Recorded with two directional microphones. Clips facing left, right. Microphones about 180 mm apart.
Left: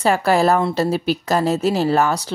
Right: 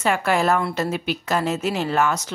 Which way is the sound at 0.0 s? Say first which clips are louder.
Left 4 dB; 35° left (ahead or behind).